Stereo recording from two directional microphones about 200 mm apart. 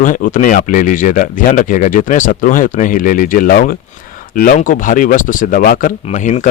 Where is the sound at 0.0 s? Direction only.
40° left (ahead or behind).